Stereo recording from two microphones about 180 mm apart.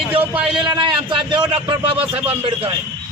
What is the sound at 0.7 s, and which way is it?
A man's voice, 25° right (ahead or behind).